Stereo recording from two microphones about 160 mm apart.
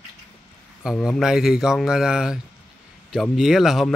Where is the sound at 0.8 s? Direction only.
Centre (ahead or behind).